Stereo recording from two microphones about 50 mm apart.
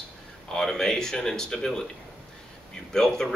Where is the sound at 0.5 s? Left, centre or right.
Centre.